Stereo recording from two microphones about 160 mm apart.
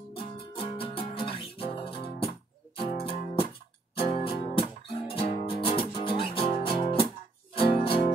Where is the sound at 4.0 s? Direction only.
35° left (ahead or behind).